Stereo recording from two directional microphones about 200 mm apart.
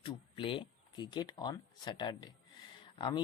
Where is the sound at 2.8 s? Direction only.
25° left (ahead or behind).